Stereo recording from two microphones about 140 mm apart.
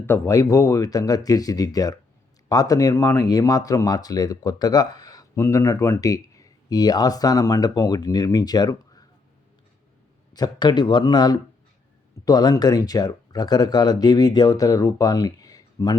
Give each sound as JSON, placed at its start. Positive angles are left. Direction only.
{"t": 0.0, "sound": "speech", "side_deg": 20}
{"t": 10.3, "sound": "speech", "side_deg": 30}